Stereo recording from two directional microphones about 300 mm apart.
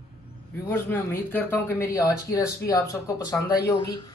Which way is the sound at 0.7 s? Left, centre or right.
Centre.